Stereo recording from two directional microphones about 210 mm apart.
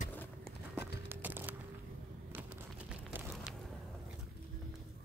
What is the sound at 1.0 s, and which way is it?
Music, 10° right (ahead or behind).